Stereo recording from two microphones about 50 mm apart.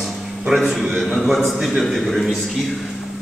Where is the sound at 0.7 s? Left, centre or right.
Centre.